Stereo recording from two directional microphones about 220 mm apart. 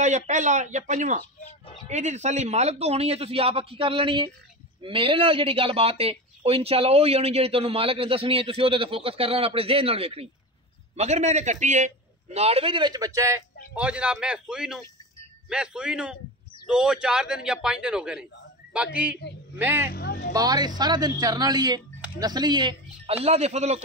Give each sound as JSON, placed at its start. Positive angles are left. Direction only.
{"t": 0.0, "sound": "speech", "side_deg": -35}
{"t": 19.3, "sound": "a man's voice", "side_deg": 50}
{"t": 19.6, "sound": "speech", "side_deg": -10}
{"t": 19.9, "sound": "speech", "side_deg": 45}
{"t": 20.3, "sound": "speech", "side_deg": -20}